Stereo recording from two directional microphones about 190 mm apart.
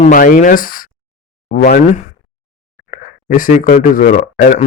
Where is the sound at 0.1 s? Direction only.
45° left (ahead or behind).